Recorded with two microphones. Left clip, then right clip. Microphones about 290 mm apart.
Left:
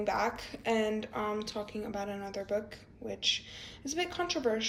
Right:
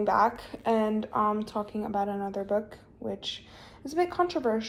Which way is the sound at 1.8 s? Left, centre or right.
Right.